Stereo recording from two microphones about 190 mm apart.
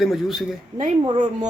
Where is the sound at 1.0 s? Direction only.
25° right (ahead or behind).